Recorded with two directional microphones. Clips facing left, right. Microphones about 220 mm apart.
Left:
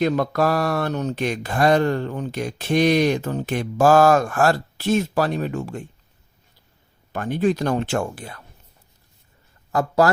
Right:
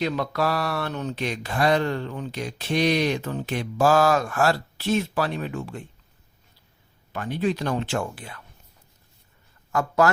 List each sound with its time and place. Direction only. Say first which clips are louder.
0.0 s speech: left 5 dB; 45° left (ahead or behind)
7.1 s speech: left 5 dB; 50° left (ahead or behind)
9.7 s speech: left 3 dB; 35° left (ahead or behind)